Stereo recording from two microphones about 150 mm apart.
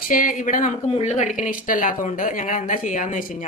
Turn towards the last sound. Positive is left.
turn(degrees=60)  # may be behind; listen again after turning